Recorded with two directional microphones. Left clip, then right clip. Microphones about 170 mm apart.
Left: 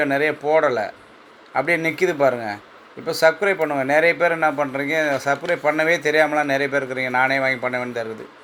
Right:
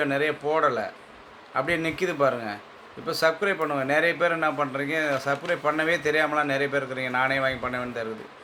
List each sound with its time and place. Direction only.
0.0 s a man's voice: 25° left (ahead or behind)